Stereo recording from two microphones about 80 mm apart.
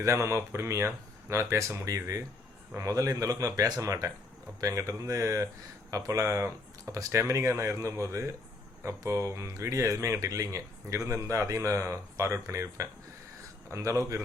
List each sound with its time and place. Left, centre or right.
0.0 s speech: right